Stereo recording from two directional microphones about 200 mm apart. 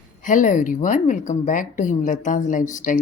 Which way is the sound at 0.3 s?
40° left (ahead or behind).